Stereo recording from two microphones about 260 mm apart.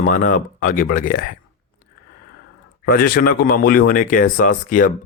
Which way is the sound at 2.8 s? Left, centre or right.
Left.